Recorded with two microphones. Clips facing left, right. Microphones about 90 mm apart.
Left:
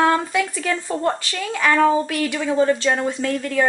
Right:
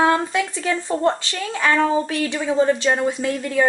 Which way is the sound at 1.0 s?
25° right (ahead or behind).